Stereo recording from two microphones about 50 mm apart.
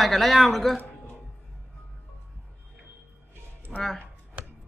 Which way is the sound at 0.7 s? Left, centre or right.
Left.